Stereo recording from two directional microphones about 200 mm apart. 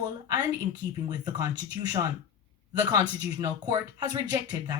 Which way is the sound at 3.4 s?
20° right (ahead or behind).